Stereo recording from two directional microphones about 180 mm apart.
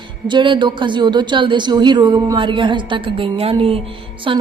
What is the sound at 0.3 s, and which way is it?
A woman's voice, 25° right (ahead or behind).